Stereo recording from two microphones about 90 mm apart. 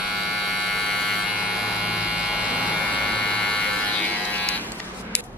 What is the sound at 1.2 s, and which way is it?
Electric shaver, 10° right (ahead or behind).